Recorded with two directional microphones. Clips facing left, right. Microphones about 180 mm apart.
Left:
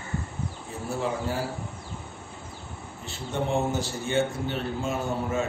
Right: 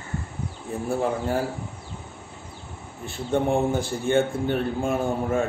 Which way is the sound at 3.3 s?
55° right (ahead or behind).